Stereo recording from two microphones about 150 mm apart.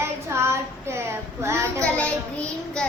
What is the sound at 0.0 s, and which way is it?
Child singing, 15° right (ahead or behind).